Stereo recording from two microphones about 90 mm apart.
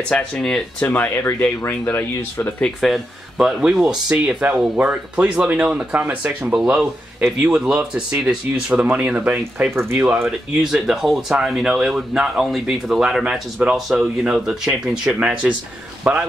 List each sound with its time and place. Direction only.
0.1 s speech: 10° left (ahead or behind)
0.8 s speech: 25° left (ahead or behind)
2.8 s speech: 5° right (ahead or behind)
9.8 s speech: 25° right (ahead or behind)
10.2 s a man's voice: 5° right (ahead or behind)